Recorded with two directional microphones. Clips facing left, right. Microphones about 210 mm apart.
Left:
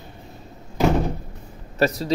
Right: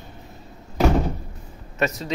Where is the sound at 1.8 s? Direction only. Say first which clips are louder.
Left 4 dB; 35° left (ahead or behind).